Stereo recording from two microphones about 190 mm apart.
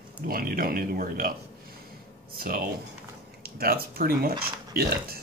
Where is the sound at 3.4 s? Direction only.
55° right (ahead or behind).